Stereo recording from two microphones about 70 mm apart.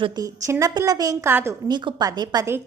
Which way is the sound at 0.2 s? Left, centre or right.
Right.